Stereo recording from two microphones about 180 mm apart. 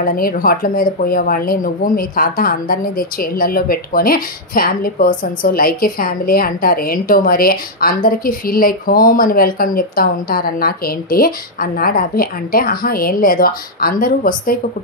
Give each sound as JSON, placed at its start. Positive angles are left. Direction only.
{"t": 0.0, "sound": "speech", "side_deg": 55}